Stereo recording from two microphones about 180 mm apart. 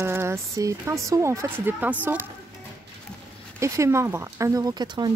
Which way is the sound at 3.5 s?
15° right (ahead or behind).